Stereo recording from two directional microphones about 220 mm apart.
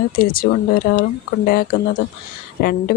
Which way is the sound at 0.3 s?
45° left (ahead or behind).